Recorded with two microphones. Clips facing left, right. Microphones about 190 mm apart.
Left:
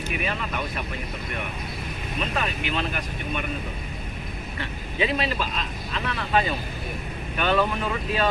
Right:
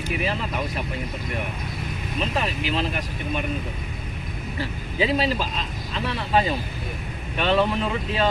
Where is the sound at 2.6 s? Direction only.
30° right (ahead or behind).